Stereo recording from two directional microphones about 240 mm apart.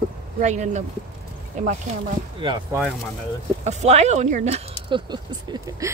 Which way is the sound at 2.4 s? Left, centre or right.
Centre.